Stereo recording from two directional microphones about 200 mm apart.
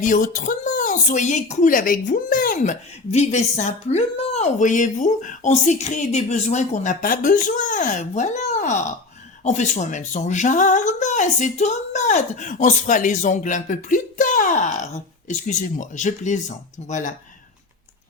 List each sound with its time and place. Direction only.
0.0 s speech: 40° left (ahead or behind)